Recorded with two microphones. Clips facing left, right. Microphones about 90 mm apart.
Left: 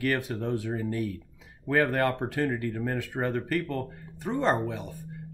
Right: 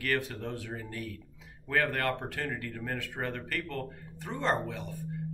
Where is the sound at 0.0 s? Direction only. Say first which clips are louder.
Left 4 dB; 20° left (ahead or behind).